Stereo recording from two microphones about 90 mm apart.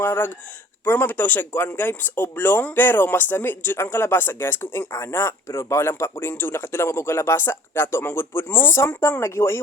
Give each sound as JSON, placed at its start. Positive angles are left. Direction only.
{"t": 0.0, "sound": "speech", "side_deg": 25}